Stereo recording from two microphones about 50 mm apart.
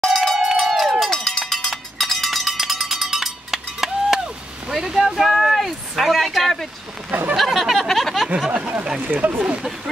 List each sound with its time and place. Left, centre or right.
0.1 s crowd: centre
0.6 s run: centre
1.1 s cowbell: centre
5.3 s a sound: centre
8.5 s a sound: right
9.0 s speech: right
9.4 s speech: centre